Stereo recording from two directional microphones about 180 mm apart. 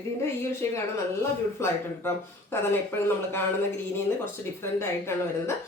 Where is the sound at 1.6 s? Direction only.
15° left (ahead or behind).